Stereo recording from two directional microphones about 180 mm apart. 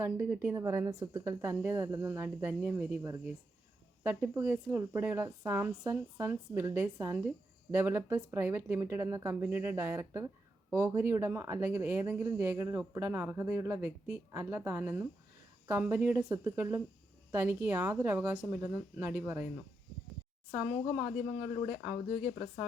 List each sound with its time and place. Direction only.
0.0 s speech: 10° right (ahead or behind)
21.7 s speech: 35° left (ahead or behind)